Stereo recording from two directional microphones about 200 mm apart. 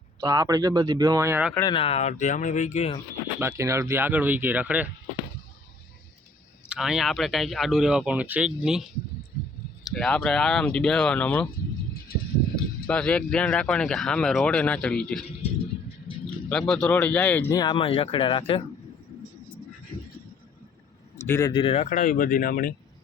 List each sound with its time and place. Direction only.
0.2 s speech: 20° right (ahead or behind)
1.5 s speech: 20° left (ahead or behind)
3.4 s speech: 15° right (ahead or behind)
6.7 s speech: 5° right (ahead or behind)
9.8 s speech: 5° left (ahead or behind)
12.5 s speech: 5° left (ahead or behind)
16.5 s speech: 5° left (ahead or behind)
17.6 s speech: 25° left (ahead or behind)
21.2 s speech: 15° left (ahead or behind); by 22.7 s 45° left (ahead or behind)